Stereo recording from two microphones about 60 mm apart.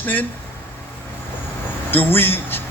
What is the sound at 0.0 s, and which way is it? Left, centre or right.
Speech, left.